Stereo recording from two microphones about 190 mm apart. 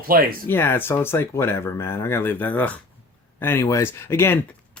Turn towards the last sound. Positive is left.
turn(degrees=10)  # may be behind; listen again after turning